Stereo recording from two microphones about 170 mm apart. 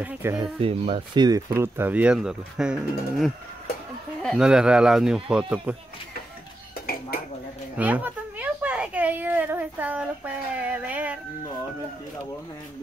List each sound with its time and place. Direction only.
0.0 s speech: 10° right (ahead or behind)
0.4 s speech: 35° right (ahead or behind); by 5.8 s 10° right (ahead or behind)
6.7 s dishes: 60° left (ahead or behind)
7.7 s a sound: 10° right (ahead or behind)